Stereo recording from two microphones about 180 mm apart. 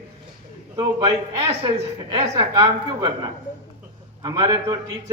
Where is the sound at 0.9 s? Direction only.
20° right (ahead or behind).